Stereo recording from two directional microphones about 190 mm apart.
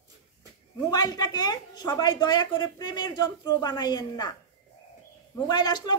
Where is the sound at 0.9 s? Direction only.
20° left (ahead or behind).